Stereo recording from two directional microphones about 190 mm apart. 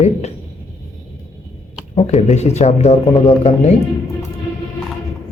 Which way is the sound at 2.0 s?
35° left (ahead or behind).